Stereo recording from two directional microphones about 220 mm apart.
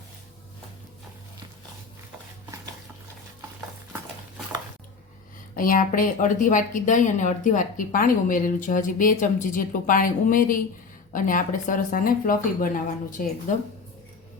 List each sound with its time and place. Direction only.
5.5 s a woman's voice: 40° left (ahead or behind)